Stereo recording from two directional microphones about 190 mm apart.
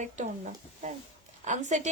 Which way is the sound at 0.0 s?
40° right (ahead or behind).